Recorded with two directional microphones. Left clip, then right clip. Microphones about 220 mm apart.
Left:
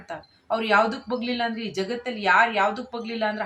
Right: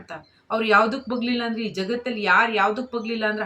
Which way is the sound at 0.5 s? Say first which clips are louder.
Right 2 dB; 5° left (ahead or behind).